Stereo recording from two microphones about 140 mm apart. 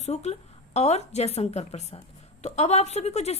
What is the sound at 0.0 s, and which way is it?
A woman's voice, 50° left (ahead or behind).